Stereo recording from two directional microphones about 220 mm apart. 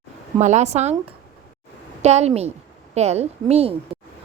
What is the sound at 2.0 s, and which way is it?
A woman's voice, 30° right (ahead or behind).